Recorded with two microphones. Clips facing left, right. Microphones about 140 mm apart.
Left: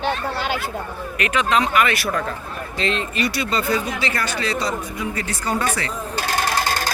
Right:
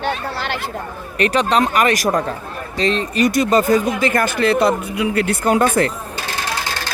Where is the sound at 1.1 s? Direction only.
35° right (ahead or behind); by 5.8 s 55° right (ahead or behind).